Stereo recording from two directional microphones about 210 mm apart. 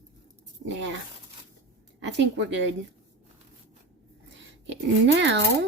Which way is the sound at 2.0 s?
60° right (ahead or behind).